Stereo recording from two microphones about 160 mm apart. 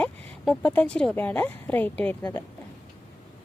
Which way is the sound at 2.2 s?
20° left (ahead or behind).